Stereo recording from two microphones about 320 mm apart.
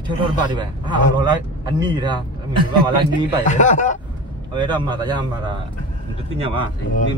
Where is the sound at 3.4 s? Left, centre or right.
Left.